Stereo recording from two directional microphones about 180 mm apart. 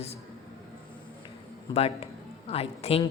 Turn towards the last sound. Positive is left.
turn(degrees=35)  # may be behind; listen again after turning